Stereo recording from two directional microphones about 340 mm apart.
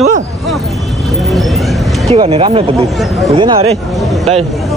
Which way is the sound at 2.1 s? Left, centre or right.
Centre.